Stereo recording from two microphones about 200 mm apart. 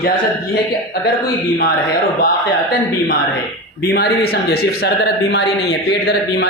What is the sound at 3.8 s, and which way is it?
A man's voice, 50° left (ahead or behind).